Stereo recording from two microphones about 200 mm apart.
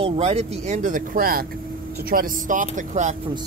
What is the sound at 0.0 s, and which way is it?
Speech, 30° right (ahead or behind).